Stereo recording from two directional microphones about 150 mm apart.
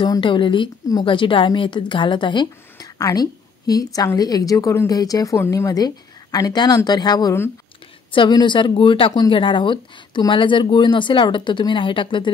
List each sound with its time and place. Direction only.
0.0 s a woman's voice: 35° left (ahead or behind)